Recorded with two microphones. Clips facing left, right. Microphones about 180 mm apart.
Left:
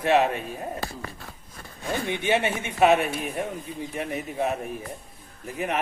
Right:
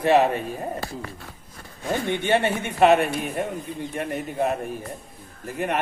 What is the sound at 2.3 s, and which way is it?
Speech, 60° right (ahead or behind).